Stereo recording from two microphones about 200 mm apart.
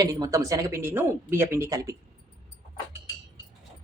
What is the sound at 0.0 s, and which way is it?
Speech, 20° right (ahead or behind).